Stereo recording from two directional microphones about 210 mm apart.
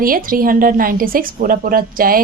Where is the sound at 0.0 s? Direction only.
40° right (ahead or behind).